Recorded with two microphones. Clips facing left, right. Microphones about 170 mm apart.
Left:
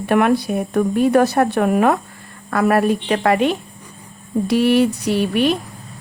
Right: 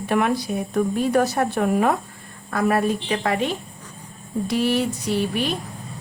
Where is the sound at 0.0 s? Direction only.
60° left (ahead or behind).